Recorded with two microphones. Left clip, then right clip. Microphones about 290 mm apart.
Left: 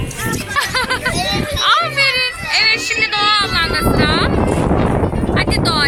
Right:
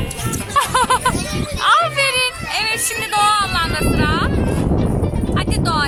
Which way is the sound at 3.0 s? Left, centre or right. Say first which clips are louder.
Right 1 dB; centre.